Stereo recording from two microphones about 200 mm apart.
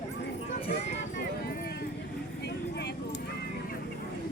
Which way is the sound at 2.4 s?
55° left (ahead or behind).